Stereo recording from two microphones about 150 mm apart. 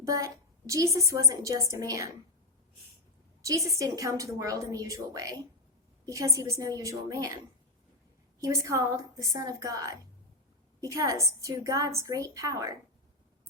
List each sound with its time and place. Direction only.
0.0 s a woman's voice: 20° right (ahead or behind)
3.4 s a woman's voice: 20° right (ahead or behind)
8.4 s a woman's voice: 20° right (ahead or behind)